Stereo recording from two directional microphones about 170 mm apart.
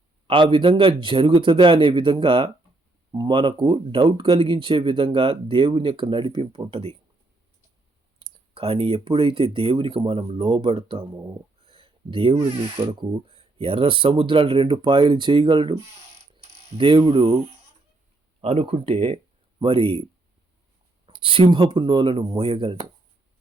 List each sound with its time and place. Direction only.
0.3 s speech: 30° right (ahead or behind)
8.2 s speech: 35° right (ahead or behind)
11.6 s a sound: 30° right (ahead or behind)
12.9 s speech: 30° right (ahead or behind)
21.1 s speech: 30° right (ahead or behind)